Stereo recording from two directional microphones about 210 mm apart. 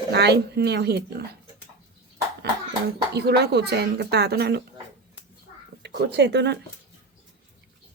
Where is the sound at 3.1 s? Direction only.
50° right (ahead or behind).